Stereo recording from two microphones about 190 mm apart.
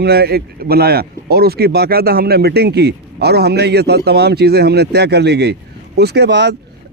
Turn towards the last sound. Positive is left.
turn(degrees=-60)  # may be behind; listen again after turning